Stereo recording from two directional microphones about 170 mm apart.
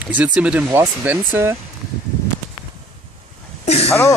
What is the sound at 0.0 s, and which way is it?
Speech, 10° right (ahead or behind).